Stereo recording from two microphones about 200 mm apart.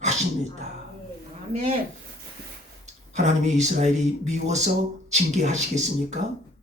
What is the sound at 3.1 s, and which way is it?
Speech, 35° right (ahead or behind).